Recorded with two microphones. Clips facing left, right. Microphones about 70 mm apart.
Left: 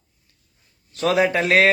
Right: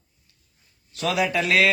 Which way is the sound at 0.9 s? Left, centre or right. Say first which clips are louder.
Left 5 dB; left.